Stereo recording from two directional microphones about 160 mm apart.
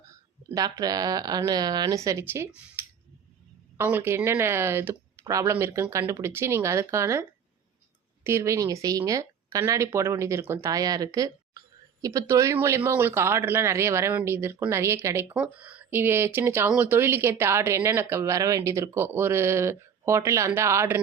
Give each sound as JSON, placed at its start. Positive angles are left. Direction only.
{"t": 0.0, "sound": "speech", "side_deg": -20}
{"t": 2.8, "sound": "scissors", "side_deg": -10}
{"t": 3.8, "sound": "speech", "side_deg": -15}